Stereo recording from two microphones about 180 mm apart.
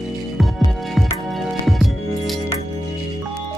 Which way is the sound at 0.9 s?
Centre (ahead or behind).